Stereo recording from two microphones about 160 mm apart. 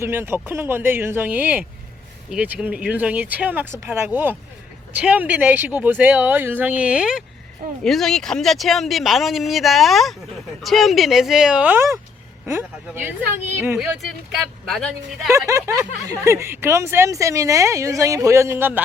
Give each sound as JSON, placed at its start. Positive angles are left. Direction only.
{"t": 0.0, "sound": "speech", "side_deg": -15}
{"t": 13.7, "sound": "speech", "side_deg": 0}
{"t": 15.4, "sound": "speech", "side_deg": -20}